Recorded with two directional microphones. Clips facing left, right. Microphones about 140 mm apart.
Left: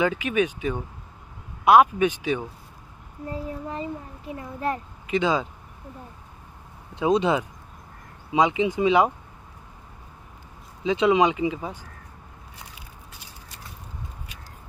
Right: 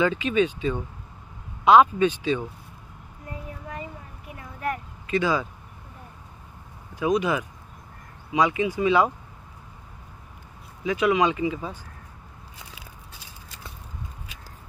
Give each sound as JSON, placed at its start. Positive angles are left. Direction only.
{"t": 0.0, "sound": "speech", "side_deg": 10}
{"t": 3.3, "sound": "a sound", "side_deg": 30}
{"t": 7.0, "sound": "speech", "side_deg": 25}
{"t": 10.8, "sound": "speech", "side_deg": 20}